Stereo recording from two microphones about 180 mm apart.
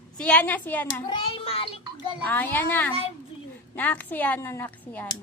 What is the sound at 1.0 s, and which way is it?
Speech, 30° left (ahead or behind).